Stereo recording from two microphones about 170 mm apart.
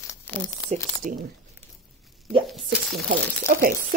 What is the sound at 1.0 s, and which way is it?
Speech, 50° right (ahead or behind).